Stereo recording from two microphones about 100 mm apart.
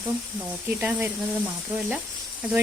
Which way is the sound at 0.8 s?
15° right (ahead or behind).